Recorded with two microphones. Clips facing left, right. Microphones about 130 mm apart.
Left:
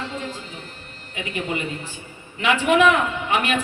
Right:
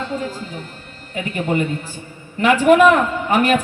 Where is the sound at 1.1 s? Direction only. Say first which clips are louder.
Right 7 dB; 45° right (ahead or behind).